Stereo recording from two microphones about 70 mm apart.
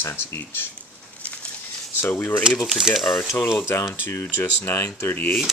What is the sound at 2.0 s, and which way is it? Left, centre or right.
Speech, left.